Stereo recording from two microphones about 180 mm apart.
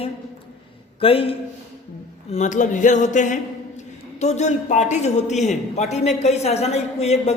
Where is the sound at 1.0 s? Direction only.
30° left (ahead or behind).